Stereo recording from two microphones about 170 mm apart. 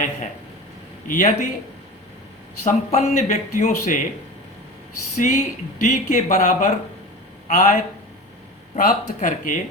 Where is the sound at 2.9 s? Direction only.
45° left (ahead or behind).